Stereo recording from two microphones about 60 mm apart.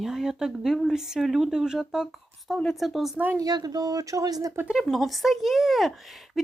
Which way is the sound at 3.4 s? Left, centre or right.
Right.